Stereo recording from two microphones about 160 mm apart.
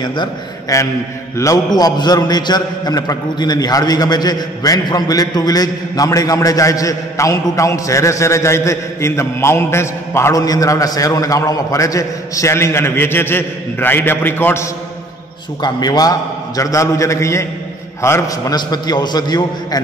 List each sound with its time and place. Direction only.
0.0 s a man's voice: 30° left (ahead or behind)
15.6 s a man's voice: 25° left (ahead or behind)